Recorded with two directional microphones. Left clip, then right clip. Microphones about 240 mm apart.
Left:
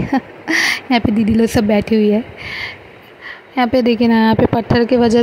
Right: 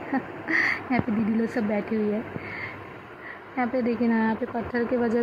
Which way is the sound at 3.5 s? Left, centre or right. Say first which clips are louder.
Left 12 dB; left.